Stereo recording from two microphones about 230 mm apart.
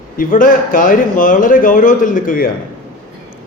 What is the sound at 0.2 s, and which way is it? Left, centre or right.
A man's voice, left.